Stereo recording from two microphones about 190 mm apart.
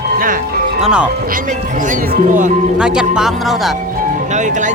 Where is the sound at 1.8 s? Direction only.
45° right (ahead or behind).